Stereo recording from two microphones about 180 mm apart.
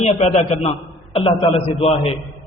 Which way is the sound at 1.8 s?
35° left (ahead or behind).